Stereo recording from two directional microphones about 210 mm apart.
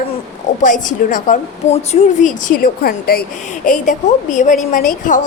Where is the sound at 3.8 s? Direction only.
35° left (ahead or behind).